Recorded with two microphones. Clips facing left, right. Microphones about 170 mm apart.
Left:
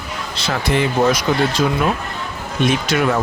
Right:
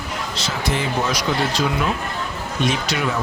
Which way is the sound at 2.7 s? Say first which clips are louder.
Left 6 dB; 55° left (ahead or behind).